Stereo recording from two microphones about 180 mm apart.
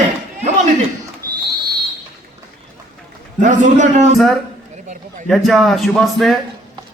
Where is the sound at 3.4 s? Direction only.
45° right (ahead or behind).